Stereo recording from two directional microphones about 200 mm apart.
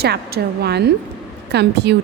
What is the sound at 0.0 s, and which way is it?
A woman's voice, 55° right (ahead or behind).